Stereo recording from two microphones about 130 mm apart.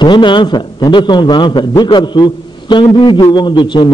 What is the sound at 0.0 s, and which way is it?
A man's voice, 35° left (ahead or behind).